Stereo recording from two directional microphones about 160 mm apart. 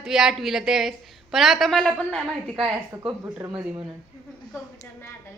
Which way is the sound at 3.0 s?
15° right (ahead or behind).